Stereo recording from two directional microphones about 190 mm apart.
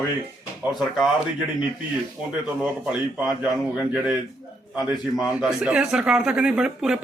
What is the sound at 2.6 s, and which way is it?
Speech, 5° right (ahead or behind).